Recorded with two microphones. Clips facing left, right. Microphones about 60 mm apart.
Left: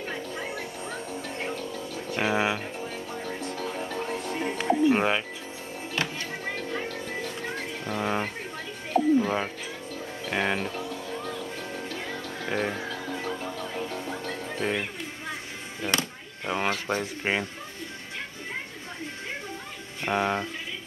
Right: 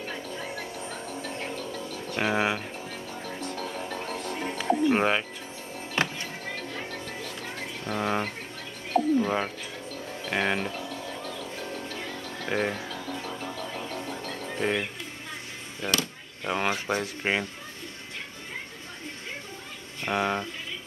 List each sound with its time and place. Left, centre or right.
0.0 s a sound: centre
0.9 s music: centre
1.5 s a sound: centre
2.9 s music: centre
4.1 s music: centre
4.9 s speech: centre
6.0 s music: right
7.1 s music: centre
10.9 s vehicle: centre
12.4 s music: centre
12.8 s music: centre
14.5 s music: centre
16.4 s a sound: centre
20.1 s a sound: centre